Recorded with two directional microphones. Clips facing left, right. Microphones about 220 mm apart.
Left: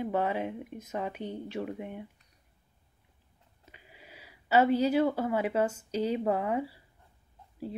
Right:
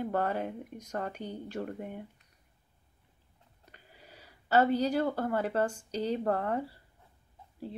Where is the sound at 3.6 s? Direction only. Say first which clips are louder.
Left 1 dB; 5° left (ahead or behind).